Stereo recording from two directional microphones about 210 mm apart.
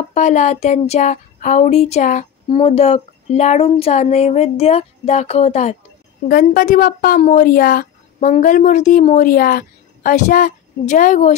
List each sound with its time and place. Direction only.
0.1 s a woman's voice: 35° left (ahead or behind)